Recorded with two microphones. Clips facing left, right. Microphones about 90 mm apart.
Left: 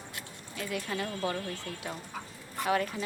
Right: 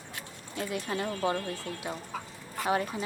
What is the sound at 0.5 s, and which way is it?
Speech, 30° right (ahead or behind).